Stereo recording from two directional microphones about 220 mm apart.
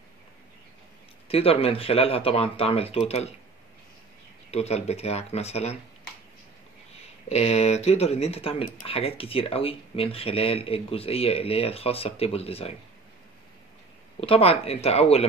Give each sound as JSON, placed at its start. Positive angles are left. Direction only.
{"t": 1.3, "sound": "speech", "side_deg": 25}
{"t": 4.5, "sound": "speech", "side_deg": 30}
{"t": 7.2, "sound": "speech", "side_deg": 30}
{"t": 14.2, "sound": "speech", "side_deg": 25}